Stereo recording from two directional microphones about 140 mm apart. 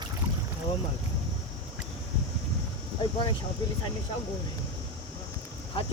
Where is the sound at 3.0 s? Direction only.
30° left (ahead or behind).